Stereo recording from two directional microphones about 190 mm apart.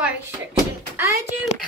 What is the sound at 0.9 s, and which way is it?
Speech, 15° right (ahead or behind).